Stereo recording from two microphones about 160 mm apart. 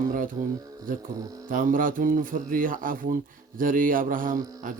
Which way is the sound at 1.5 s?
60° right (ahead or behind).